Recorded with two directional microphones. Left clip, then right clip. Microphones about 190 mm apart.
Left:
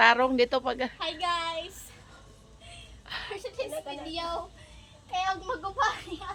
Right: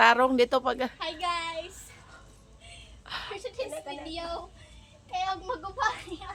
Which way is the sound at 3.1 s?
25° right (ahead or behind).